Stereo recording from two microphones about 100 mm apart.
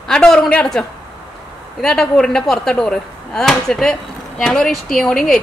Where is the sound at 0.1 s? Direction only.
10° left (ahead or behind).